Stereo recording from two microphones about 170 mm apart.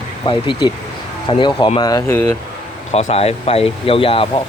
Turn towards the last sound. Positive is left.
turn(degrees=35)  # may be behind; listen again after turning